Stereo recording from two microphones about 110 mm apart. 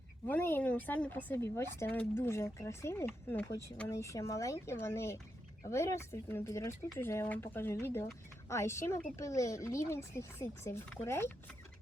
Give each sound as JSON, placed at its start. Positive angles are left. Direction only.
{"t": 0.3, "sound": "speech", "side_deg": 20}
{"t": 3.1, "sound": "speech", "side_deg": 15}
{"t": 3.8, "sound": "speech", "side_deg": 25}